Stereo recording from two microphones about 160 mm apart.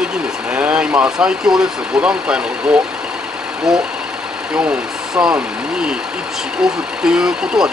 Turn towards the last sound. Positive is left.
turn(degrees=-5)  # may be behind; listen again after turning